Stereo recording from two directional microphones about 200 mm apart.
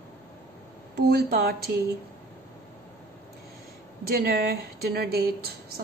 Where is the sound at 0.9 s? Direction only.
50° right (ahead or behind).